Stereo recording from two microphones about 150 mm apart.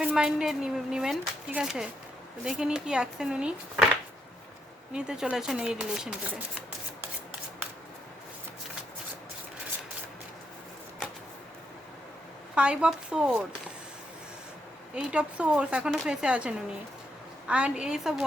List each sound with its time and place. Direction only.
0.0 s speech: 5° right (ahead or behind)
4.9 s speech: 5° right (ahead or behind)
12.5 s speech: 5° right (ahead or behind)
14.9 s speech: 5° right (ahead or behind)